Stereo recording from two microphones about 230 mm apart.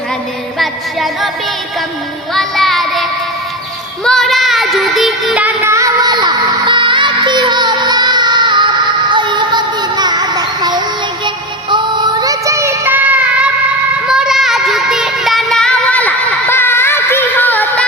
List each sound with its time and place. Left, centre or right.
0.6 s child singing: centre
2.3 s child singing: centre